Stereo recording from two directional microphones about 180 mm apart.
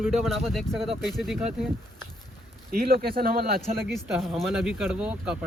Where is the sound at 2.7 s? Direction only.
55° right (ahead or behind).